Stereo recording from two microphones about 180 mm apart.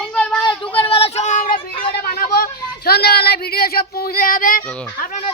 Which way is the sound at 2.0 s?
55° left (ahead or behind).